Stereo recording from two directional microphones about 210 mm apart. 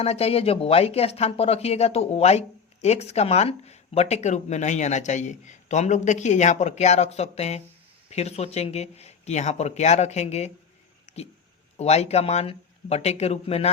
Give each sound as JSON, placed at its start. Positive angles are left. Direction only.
{"t": 0.0, "sound": "speech", "side_deg": 30}
{"t": 11.1, "sound": "a sound", "side_deg": 35}
{"t": 11.8, "sound": "speech", "side_deg": 30}